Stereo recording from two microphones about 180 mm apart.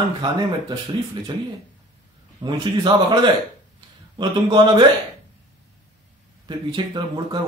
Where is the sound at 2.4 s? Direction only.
25° right (ahead or behind).